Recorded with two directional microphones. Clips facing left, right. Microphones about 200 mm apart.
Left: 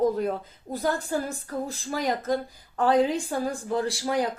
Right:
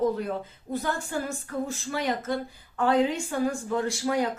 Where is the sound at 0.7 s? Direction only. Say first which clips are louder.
Left 3 dB; 35° left (ahead or behind).